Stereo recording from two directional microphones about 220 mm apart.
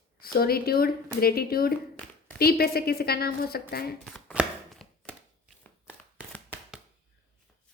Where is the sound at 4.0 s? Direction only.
Centre (ahead or behind).